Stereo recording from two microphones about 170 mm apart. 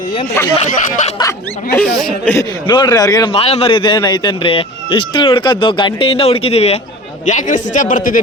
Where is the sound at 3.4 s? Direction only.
35° left (ahead or behind).